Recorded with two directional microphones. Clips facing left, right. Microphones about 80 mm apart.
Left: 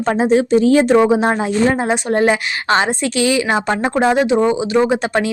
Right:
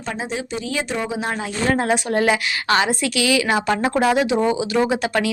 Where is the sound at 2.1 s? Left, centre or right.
Left.